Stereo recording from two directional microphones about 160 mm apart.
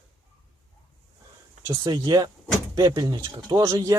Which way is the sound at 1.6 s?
25° right (ahead or behind).